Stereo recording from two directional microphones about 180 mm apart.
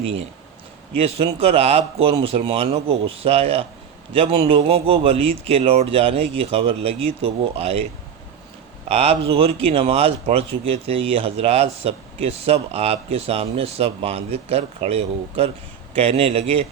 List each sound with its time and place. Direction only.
1.2 s speech: 35° right (ahead or behind)
8.9 s speech: 35° right (ahead or behind)